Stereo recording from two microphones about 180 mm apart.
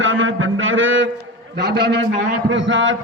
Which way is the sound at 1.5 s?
65° right (ahead or behind).